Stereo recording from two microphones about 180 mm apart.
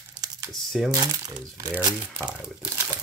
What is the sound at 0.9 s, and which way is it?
Speech, 20° right (ahead or behind).